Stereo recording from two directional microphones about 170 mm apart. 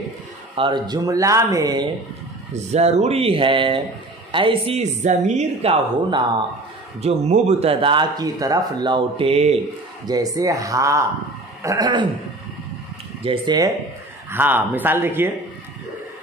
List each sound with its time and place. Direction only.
0.6 s speech: 25° right (ahead or behind)
2.5 s speech: 40° right (ahead or behind)
10.0 s speech: 20° right (ahead or behind)
13.2 s speech: 30° right (ahead or behind)
14.3 s speech: 10° right (ahead or behind)